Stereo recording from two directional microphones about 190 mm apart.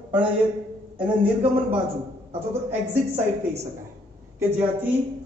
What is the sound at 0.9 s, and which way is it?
Speech, 5° right (ahead or behind).